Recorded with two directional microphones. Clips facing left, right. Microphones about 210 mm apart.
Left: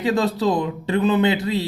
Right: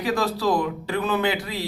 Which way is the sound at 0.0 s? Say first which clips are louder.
Left 4 dB; 25° left (ahead or behind).